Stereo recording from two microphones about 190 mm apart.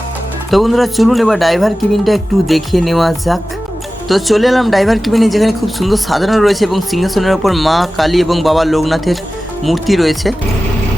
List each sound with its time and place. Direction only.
0.5 s speech: centre (ahead or behind)